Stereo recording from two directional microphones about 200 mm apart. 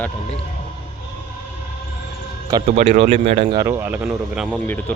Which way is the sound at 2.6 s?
35° right (ahead or behind).